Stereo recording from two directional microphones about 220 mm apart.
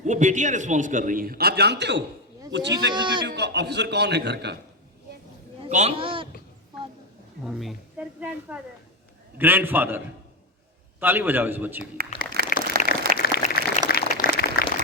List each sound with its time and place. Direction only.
0.0 s a man's voice: 35° right (ahead or behind); by 2.7 s 55° right (ahead or behind)
2.9 s a man's voice: 20° right (ahead or behind)
3.2 s a man's voice: 50° right (ahead or behind)
5.6 s a man's voice: 30° right (ahead or behind)
7.4 s a man's voice: centre (ahead or behind)
11.0 s a man's voice: 10° right (ahead or behind)
12.0 s a man's voice: 45° right (ahead or behind)
12.4 s a sound: 50° right (ahead or behind)
13.1 s a sound: 45° left (ahead or behind)